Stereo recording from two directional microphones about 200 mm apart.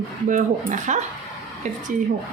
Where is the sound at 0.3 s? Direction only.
40° right (ahead or behind).